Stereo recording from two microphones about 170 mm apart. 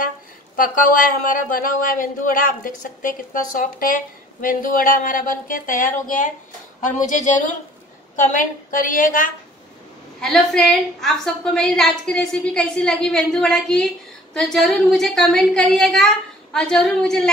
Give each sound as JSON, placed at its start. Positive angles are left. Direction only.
{"t": 0.6, "sound": "speech", "side_deg": 55}
{"t": 10.2, "sound": "a woman's voice", "side_deg": 5}